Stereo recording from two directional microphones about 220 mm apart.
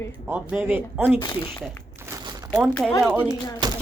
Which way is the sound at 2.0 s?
15° right (ahead or behind).